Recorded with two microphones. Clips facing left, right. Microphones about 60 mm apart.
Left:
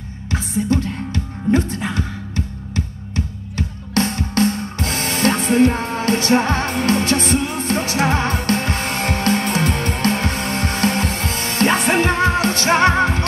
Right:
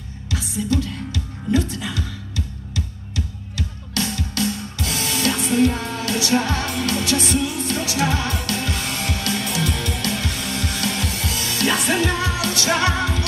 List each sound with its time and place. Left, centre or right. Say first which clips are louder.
0.3 s music: left 4 dB; left